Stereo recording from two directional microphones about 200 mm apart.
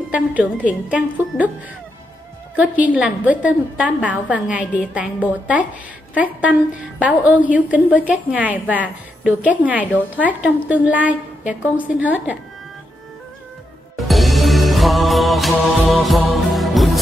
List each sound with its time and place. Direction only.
0.1 s a woman's voice: 5° right (ahead or behind)
2.5 s a woman's voice: 5° right (ahead or behind)
13.9 s music: centre (ahead or behind)